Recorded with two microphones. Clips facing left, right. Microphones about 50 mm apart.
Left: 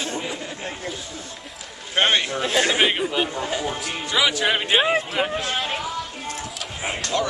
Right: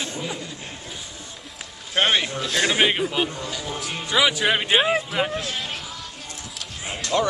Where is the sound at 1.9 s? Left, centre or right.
Centre.